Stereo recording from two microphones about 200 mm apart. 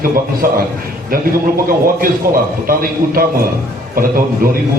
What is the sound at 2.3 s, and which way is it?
A man's voice, 45° right (ahead or behind).